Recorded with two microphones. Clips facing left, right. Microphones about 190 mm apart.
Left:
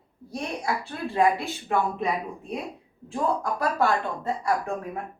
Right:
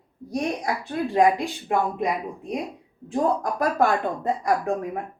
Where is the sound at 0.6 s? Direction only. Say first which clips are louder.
Right 3 dB; 15° right (ahead or behind).